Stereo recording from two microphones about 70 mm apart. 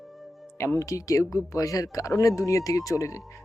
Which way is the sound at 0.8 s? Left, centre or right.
Left.